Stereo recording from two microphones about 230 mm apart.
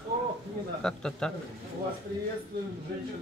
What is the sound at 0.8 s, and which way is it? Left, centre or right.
Speech, centre.